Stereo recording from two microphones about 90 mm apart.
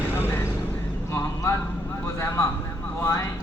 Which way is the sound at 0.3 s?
25° left (ahead or behind).